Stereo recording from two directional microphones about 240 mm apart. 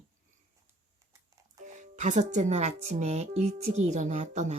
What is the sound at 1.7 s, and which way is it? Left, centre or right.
Speech, right.